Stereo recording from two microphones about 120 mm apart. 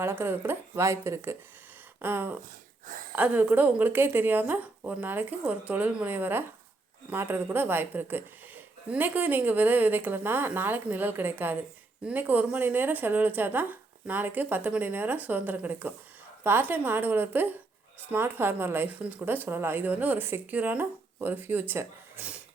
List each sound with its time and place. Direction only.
0.0 s speech: 20° right (ahead or behind)